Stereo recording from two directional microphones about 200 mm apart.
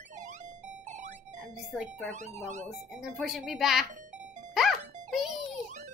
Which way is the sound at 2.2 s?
35° right (ahead or behind).